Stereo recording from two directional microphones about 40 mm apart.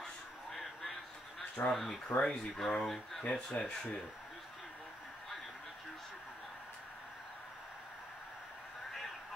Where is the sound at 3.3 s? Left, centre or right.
Left.